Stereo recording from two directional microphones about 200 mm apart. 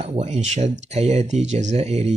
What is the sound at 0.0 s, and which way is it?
Speech, 35° right (ahead or behind).